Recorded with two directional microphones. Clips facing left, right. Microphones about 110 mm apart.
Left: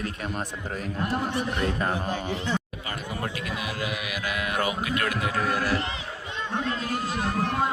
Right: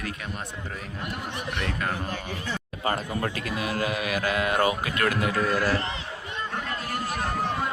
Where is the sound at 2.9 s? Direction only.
45° right (ahead or behind).